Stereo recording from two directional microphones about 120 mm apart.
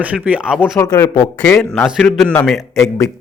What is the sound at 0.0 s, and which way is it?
Speech, 10° right (ahead or behind).